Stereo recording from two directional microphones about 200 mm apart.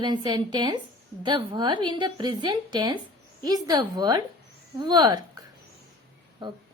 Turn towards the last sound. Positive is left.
turn(degrees=-25)  # may be behind; listen again after turning